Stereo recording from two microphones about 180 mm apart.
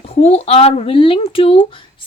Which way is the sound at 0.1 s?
35° left (ahead or behind).